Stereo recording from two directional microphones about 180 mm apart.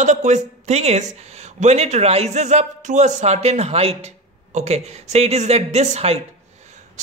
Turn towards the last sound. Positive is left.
turn(degrees=-35)  # may be behind; listen again after turning